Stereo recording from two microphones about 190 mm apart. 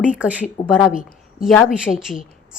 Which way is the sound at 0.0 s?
5° right (ahead or behind).